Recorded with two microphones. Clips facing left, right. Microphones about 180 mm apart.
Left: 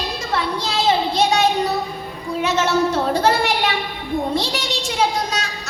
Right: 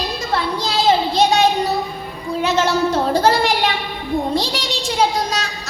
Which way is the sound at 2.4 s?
35° right (ahead or behind).